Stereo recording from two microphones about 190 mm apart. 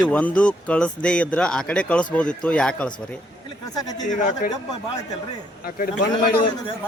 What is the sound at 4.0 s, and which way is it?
Speech, 40° left (ahead or behind).